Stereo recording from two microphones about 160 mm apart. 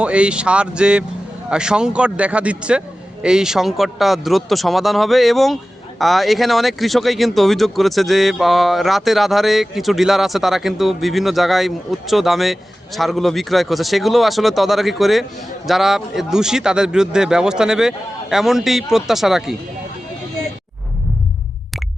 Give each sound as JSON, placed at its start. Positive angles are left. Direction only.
{"t": 0.0, "sound": "a man's voice", "side_deg": -5}